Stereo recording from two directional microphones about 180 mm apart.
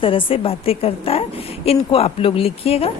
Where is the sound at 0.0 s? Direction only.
30° left (ahead or behind).